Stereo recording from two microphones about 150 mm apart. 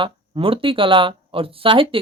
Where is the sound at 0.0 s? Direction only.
35° right (ahead or behind).